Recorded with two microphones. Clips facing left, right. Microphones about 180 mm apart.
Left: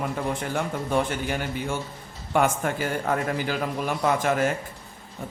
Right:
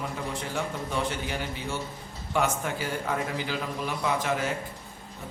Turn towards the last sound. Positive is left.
turn(degrees=50)  # may be behind; listen again after turning